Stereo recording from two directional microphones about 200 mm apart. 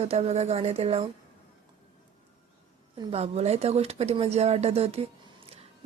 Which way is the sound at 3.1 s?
30° right (ahead or behind).